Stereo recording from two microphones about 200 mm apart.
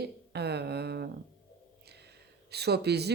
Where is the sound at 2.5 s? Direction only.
55° right (ahead or behind).